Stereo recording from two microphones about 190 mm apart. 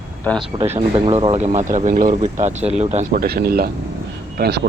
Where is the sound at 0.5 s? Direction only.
30° right (ahead or behind).